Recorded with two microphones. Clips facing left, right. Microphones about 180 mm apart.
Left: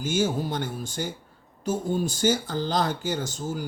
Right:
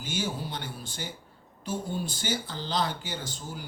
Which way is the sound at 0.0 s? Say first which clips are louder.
Left 8 dB; 45° left (ahead or behind).